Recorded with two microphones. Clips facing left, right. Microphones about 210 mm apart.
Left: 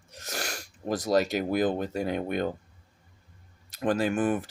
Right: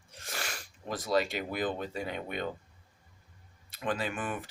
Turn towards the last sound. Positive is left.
turn(degrees=45)  # may be behind; listen again after turning